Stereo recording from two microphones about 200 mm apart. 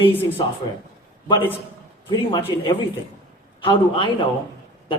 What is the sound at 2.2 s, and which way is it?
Speech, 25° left (ahead or behind).